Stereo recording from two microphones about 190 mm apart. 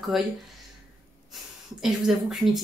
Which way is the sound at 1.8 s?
Centre (ahead or behind).